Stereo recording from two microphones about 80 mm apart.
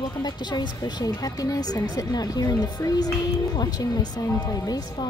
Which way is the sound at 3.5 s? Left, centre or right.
Left.